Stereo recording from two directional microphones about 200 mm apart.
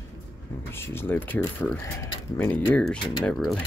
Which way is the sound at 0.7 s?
10° left (ahead or behind).